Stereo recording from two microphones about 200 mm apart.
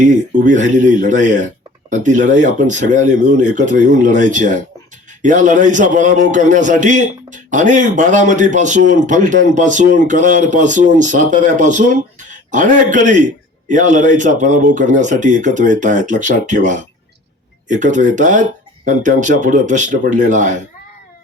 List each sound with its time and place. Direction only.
0.0 s speech: 40° right (ahead or behind)